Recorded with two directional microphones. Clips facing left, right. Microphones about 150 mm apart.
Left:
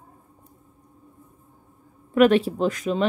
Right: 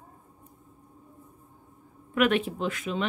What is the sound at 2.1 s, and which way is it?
Speech, 35° left (ahead or behind).